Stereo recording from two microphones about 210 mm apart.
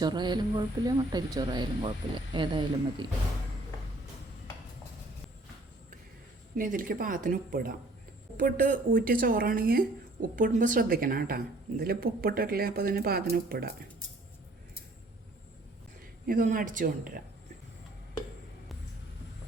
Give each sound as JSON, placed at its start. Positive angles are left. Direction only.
{"t": 0.0, "sound": "speech", "side_deg": -20}
{"t": 6.6, "sound": "a woman's voice", "side_deg": -40}
{"t": 16.2, "sound": "speech", "side_deg": -40}